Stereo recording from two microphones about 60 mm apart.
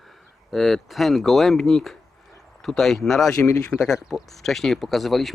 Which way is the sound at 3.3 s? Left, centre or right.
Left.